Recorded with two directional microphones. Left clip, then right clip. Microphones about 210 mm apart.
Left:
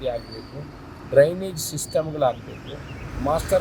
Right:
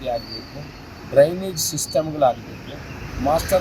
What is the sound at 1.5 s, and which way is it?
Speech, 25° left (ahead or behind).